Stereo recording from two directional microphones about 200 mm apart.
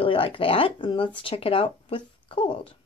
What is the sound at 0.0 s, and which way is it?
Speech, 25° left (ahead or behind).